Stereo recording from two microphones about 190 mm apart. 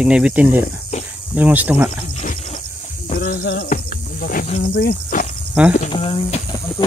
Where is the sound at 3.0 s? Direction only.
45° left (ahead or behind).